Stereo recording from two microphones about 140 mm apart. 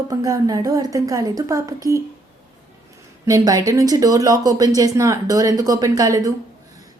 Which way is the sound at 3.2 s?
25° right (ahead or behind).